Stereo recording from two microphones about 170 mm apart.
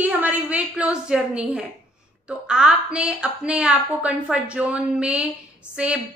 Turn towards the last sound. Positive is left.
turn(degrees=-5)  # may be behind; listen again after turning